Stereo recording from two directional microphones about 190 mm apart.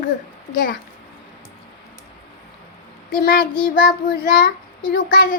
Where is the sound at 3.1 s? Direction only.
50° left (ahead or behind).